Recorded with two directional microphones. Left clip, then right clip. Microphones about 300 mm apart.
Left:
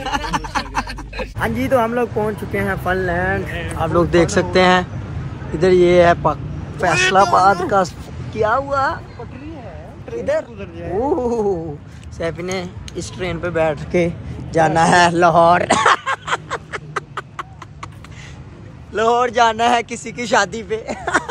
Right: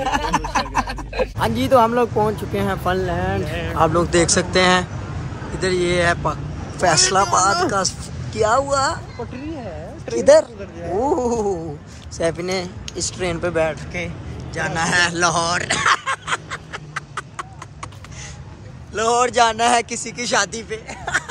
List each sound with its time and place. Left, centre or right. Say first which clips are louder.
0.0 s a sound: right 1 dB; centre
1.4 s speech: right 1 dB; centre
3.5 s speech: right 4 dB; right
3.9 s speech: left 2 dB; centre
11.0 s speech: left 1 dB; centre
13.9 s speech: left 9 dB; centre
18.9 s speech: left 2 dB; centre
20.8 s speech: left 3 dB; centre